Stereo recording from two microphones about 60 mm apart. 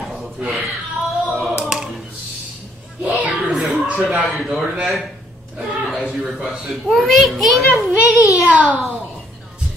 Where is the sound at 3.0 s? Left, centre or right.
Right.